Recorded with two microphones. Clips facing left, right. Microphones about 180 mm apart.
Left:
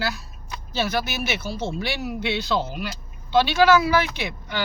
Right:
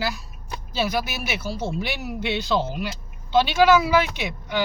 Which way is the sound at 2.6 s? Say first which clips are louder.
Right 2 dB; 15° left (ahead or behind).